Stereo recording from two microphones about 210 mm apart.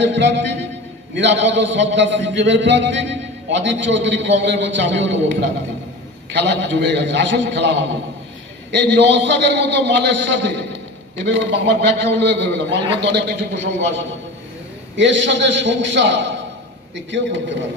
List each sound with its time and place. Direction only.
0.0 s a man's voice: 60° right (ahead or behind)
6.3 s a man's voice: 55° right (ahead or behind)
8.7 s a man's voice: 55° right (ahead or behind)